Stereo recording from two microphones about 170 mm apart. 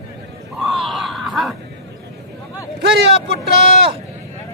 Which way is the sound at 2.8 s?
75° right (ahead or behind).